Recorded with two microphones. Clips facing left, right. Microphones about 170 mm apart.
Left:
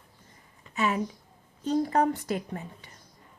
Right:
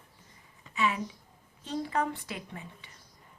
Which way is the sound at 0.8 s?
45° left (ahead or behind).